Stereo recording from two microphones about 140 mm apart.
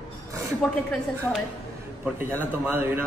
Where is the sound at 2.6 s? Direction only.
15° right (ahead or behind).